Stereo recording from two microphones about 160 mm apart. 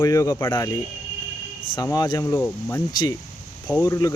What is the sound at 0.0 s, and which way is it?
Speech, 20° left (ahead or behind).